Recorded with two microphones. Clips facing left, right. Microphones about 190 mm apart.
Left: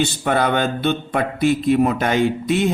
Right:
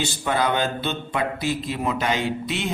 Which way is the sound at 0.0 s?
60° left (ahead or behind).